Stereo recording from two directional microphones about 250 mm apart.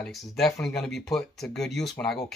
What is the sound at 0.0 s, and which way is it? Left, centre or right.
Speech, centre.